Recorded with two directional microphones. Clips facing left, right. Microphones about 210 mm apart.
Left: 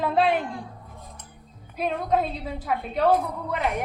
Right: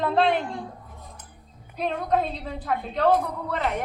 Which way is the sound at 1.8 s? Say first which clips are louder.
Even; 5° left (ahead or behind).